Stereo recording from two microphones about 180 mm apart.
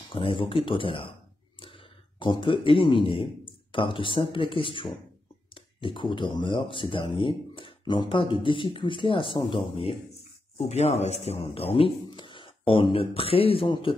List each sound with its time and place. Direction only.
0.1 s speech: 30° left (ahead or behind)